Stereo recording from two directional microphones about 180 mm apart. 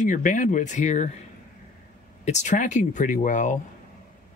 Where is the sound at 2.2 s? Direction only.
40° left (ahead or behind).